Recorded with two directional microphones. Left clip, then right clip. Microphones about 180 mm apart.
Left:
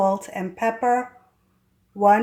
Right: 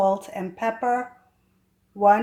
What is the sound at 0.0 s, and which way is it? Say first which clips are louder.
Speech: even; 15° left (ahead or behind).